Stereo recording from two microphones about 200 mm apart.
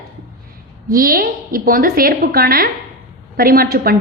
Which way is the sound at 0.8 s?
45° right (ahead or behind).